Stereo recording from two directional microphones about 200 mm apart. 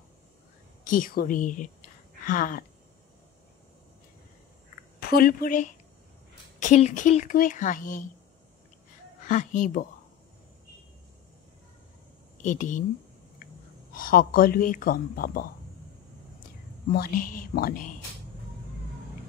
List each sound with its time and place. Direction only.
0.8 s speech: 45° left (ahead or behind)
5.0 s a woman's voice: 50° left (ahead or behind)
9.2 s a woman's voice: 40° left (ahead or behind)
12.4 s speech: 40° left (ahead or behind)
13.9 s speech: 45° left (ahead or behind)
16.9 s speech: 50° left (ahead or behind)